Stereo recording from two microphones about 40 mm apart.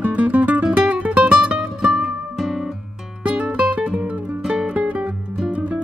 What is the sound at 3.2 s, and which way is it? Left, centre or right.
Music, right.